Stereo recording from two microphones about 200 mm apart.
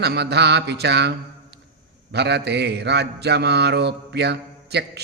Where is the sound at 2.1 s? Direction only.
55° right (ahead or behind).